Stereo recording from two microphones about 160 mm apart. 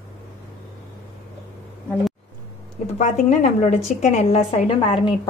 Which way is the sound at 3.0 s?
50° left (ahead or behind).